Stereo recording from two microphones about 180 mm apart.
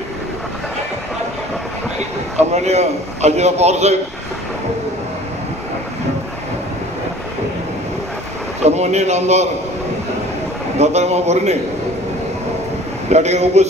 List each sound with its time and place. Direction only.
2.3 s a man's voice: 40° right (ahead or behind)
8.5 s a man's voice: 40° right (ahead or behind)
10.8 s a man's voice: 40° right (ahead or behind)
13.1 s a man's voice: 40° right (ahead or behind)